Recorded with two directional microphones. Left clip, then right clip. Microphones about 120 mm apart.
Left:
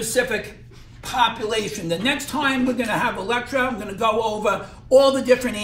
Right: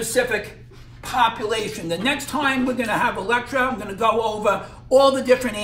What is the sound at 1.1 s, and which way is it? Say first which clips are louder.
A man's voice: right 1 dB; 25° right (ahead or behind).